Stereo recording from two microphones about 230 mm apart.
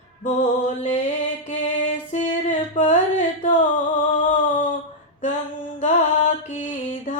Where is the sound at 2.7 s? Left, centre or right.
Left.